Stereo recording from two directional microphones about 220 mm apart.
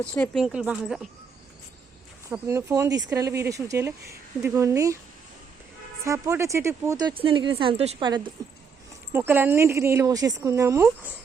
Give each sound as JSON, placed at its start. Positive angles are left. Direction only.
{"t": 0.0, "sound": "speech", "side_deg": 5}
{"t": 2.3, "sound": "speech", "side_deg": -10}
{"t": 6.1, "sound": "speech", "side_deg": -15}
{"t": 9.1, "sound": "speech", "side_deg": -10}